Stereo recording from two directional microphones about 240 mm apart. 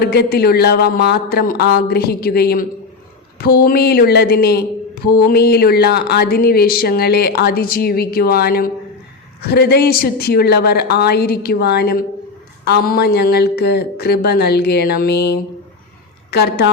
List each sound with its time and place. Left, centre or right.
0.0 s a woman's voice: left